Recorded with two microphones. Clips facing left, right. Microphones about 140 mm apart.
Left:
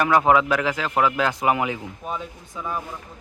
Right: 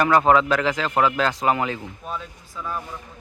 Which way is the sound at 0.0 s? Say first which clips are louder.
Right 1 dB; 10° left (ahead or behind).